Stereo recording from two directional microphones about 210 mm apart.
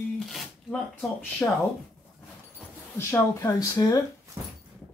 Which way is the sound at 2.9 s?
15° left (ahead or behind).